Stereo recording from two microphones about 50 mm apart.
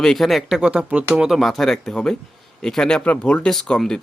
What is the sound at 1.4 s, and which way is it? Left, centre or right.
Speech, centre.